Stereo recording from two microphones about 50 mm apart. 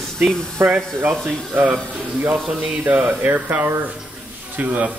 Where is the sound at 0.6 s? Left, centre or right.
Right.